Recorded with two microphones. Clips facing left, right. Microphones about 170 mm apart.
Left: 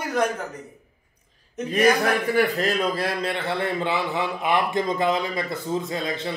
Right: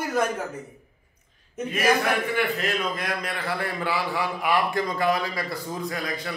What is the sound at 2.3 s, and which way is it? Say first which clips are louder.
A man's voice: left 4 dB; 40° left (ahead or behind).